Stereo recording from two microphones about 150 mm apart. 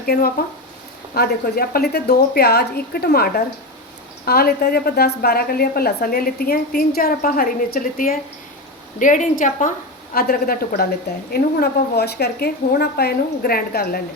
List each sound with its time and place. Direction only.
0.0 s a woman's voice: 85° left; by 8.2 s 70° left (ahead or behind)
9.0 s a woman's voice: 60° left (ahead or behind)
10.2 s a woman's voice: 85° left